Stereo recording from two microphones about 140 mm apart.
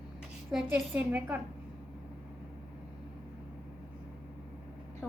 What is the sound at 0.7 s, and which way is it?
Speech, 15° right (ahead or behind).